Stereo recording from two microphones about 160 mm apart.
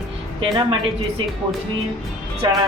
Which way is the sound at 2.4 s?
30° right (ahead or behind).